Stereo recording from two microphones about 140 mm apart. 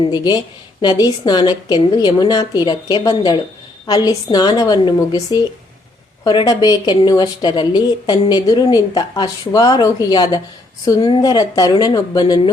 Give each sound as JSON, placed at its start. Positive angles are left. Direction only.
{"t": 0.0, "sound": "a woman's voice", "side_deg": 30}